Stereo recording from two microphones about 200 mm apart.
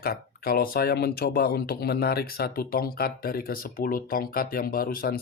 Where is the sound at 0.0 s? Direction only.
50° left (ahead or behind).